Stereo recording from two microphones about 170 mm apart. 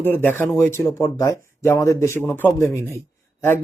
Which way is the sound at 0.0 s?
10° left (ahead or behind).